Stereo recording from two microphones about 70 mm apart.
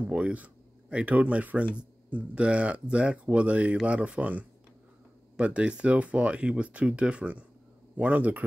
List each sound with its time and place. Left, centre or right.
0.1 s speech: centre